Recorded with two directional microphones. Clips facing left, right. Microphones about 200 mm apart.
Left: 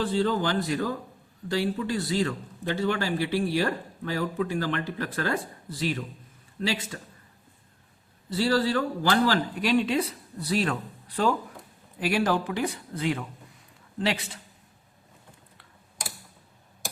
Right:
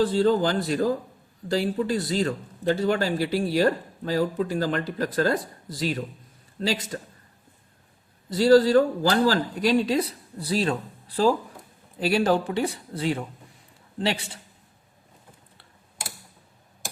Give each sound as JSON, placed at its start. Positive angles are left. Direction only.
{"t": 0.0, "sound": "speech", "side_deg": -40}
{"t": 8.3, "sound": "speech", "side_deg": -40}
{"t": 11.9, "sound": "speech", "side_deg": -30}